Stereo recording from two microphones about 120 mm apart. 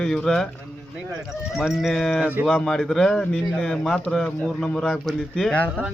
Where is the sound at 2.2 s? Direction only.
15° right (ahead or behind).